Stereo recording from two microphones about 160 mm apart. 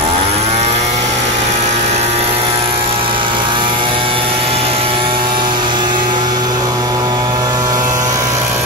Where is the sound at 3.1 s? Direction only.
30° right (ahead or behind).